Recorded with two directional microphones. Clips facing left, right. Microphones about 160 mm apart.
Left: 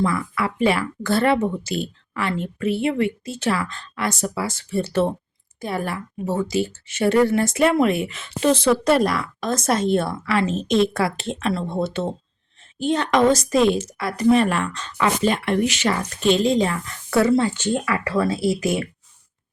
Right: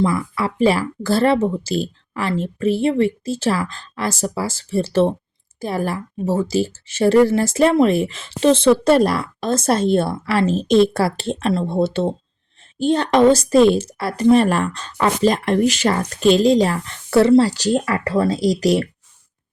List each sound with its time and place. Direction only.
0.0 s a woman's voice: 30° right (ahead or behind)